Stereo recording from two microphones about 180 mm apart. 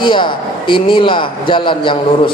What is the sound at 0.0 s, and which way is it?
A man's voice, 25° left (ahead or behind).